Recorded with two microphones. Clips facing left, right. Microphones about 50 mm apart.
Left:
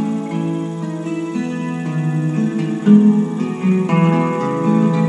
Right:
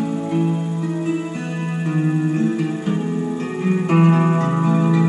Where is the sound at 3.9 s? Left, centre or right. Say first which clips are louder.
Right 4 dB; left.